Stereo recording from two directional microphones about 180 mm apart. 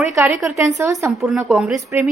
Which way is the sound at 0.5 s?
15° right (ahead or behind).